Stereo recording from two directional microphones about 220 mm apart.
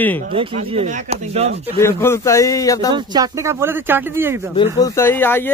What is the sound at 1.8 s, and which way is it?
Speech, 10° left (ahead or behind).